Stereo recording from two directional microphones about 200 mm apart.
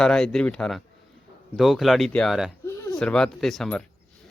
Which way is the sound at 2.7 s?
15° left (ahead or behind).